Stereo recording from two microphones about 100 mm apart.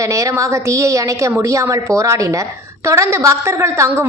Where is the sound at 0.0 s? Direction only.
35° right (ahead or behind).